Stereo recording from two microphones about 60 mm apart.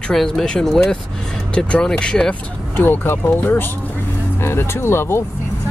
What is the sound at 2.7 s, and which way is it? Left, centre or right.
Speech, left.